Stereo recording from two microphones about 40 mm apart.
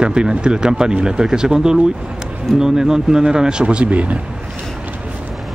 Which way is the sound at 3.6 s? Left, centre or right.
Right.